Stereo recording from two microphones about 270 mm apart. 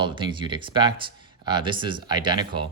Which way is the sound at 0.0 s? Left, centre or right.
Centre.